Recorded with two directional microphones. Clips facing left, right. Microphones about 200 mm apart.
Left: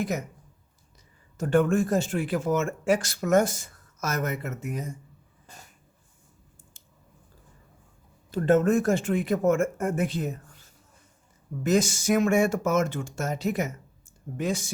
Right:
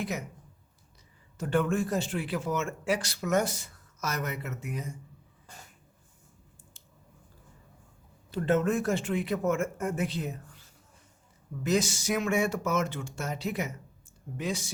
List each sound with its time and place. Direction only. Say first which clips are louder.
1.4 s speech: left 5 dB; 45° left (ahead or behind)
8.3 s speech: left 5 dB; 45° left (ahead or behind)